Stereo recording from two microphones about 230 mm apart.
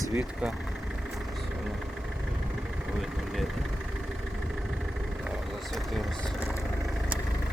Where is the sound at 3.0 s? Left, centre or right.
Centre.